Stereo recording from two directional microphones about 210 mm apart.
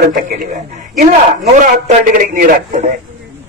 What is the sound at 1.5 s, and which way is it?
Speech, 40° right (ahead or behind).